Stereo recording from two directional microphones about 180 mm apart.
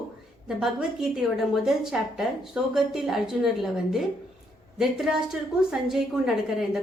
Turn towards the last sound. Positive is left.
turn(degrees=-5)  # may be behind; listen again after turning